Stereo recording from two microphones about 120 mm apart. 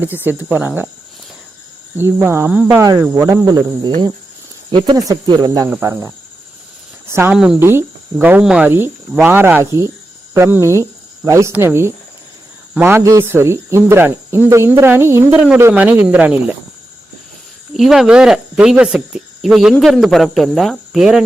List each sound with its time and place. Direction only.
0.3 s speech: 15° right (ahead or behind)
2.0 s speech: 20° right (ahead or behind)
2.7 s speech: 30° right (ahead or behind)
5.0 s speech: 35° right (ahead or behind)
5.8 s speech: 20° right (ahead or behind)
7.3 s speech: 5° right (ahead or behind)
7.6 s speech: 20° right (ahead or behind)
17.7 s speech: centre (ahead or behind)